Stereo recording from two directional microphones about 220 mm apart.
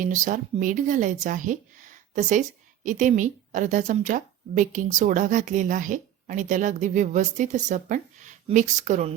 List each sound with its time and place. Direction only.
0.0 s a woman's voice: 35° right (ahead or behind)